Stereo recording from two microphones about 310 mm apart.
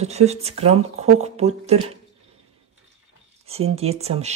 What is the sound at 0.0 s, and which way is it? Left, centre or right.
Speech, right.